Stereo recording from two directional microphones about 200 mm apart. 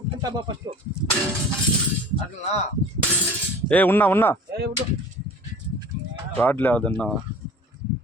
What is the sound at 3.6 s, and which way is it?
Speech, 10° left (ahead or behind).